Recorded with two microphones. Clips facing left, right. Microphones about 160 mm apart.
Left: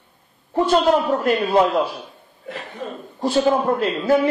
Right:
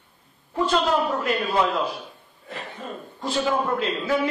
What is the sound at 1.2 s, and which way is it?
Speech, 35° left (ahead or behind).